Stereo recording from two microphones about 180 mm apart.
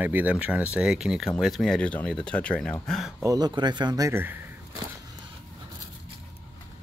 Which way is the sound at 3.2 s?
20° right (ahead or behind).